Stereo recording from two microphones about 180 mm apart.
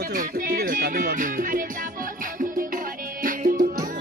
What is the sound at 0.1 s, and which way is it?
Music, 50° right (ahead or behind).